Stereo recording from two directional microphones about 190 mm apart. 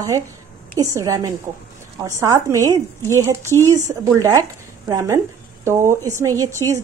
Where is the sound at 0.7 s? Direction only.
15° right (ahead or behind).